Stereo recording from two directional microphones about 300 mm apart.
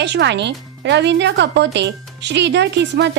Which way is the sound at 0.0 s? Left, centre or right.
Right.